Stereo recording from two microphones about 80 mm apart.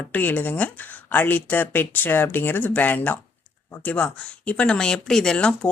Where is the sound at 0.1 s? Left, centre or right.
Left.